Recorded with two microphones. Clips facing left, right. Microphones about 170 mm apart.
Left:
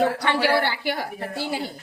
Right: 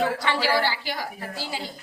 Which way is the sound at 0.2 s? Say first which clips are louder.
Left 2 dB; 60° left (ahead or behind).